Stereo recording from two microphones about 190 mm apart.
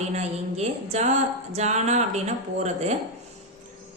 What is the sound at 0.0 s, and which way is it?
Speech, 35° right (ahead or behind).